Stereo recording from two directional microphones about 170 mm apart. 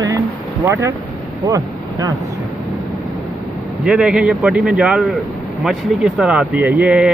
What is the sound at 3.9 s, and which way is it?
A man's voice, 5° right (ahead or behind).